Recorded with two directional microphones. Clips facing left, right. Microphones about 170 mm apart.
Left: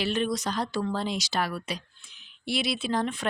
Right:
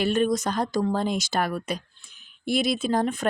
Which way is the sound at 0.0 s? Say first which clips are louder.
Right 5 dB; 50° right (ahead or behind).